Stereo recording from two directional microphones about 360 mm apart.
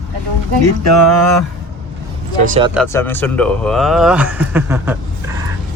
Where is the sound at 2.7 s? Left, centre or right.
Centre.